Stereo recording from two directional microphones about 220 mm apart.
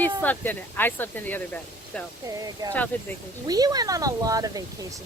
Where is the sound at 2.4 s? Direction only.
15° right (ahead or behind).